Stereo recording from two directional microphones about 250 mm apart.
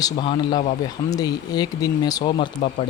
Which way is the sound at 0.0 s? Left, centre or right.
Centre.